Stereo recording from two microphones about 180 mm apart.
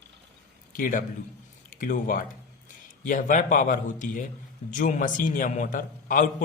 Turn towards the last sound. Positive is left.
turn(degrees=50)  # may be behind; listen again after turning